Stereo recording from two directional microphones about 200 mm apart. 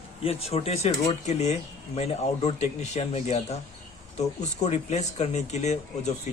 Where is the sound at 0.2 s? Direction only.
30° left (ahead or behind).